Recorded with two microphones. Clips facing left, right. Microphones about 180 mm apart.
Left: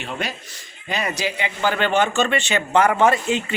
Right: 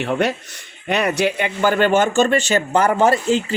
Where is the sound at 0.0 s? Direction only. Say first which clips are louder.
Right 9 dB; 65° right (ahead or behind).